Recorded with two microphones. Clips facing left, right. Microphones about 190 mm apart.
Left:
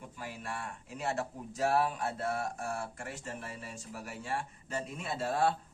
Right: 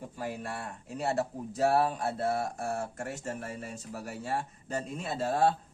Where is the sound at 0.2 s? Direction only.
40° right (ahead or behind).